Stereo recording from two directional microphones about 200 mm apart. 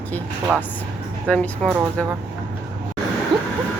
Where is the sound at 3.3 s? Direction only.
25° right (ahead or behind).